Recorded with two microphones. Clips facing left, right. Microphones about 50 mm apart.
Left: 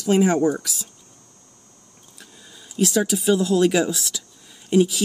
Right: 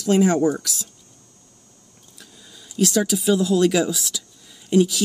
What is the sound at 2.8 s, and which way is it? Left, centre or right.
Speech, centre.